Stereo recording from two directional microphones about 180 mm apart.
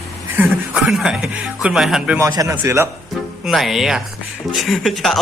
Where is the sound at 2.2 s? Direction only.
20° right (ahead or behind).